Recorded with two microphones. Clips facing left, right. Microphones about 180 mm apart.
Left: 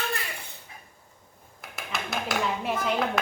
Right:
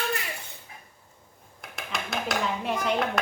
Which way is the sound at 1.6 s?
Centre (ahead or behind).